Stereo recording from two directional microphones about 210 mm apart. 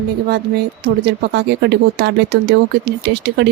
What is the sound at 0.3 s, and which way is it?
Speech, 50° right (ahead or behind).